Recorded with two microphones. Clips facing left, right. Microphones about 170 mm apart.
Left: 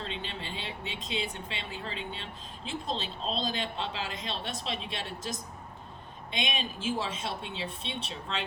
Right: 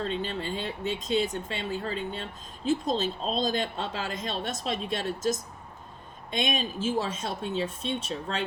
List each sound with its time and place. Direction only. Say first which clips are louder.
0.0 s speech: right 8 dB; 45° right (ahead or behind)